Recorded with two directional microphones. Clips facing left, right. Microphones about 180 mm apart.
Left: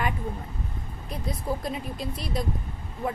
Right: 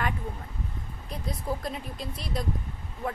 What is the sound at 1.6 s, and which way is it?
Speech, centre (ahead or behind).